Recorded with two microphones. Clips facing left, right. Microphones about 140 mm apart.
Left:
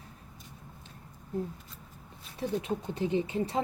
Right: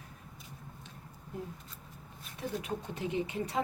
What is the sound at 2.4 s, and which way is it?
Speech, 35° left (ahead or behind).